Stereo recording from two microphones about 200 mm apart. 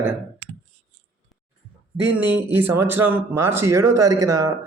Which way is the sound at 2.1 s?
10° right (ahead or behind).